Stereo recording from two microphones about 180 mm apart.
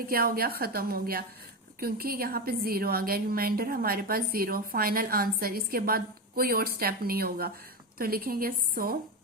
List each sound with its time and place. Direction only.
0.1 s a woman's voice: 55° right (ahead or behind)